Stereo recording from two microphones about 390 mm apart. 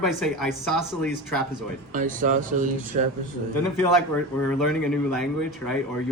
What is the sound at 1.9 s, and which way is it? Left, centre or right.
Speech, centre.